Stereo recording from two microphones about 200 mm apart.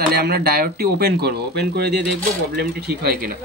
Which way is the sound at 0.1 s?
50° right (ahead or behind).